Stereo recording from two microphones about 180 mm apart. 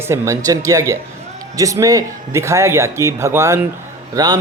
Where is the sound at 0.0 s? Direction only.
15° right (ahead or behind).